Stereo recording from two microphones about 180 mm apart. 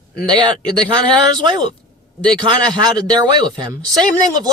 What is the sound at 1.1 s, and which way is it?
Speech, 25° right (ahead or behind).